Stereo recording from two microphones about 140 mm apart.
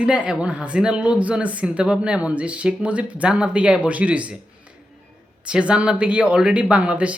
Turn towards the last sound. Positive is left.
turn(degrees=-10)  # may be behind; listen again after turning